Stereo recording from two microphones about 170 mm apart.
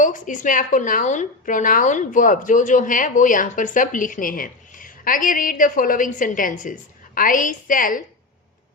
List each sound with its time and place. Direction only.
0.0 s a woman's voice: 50° left (ahead or behind)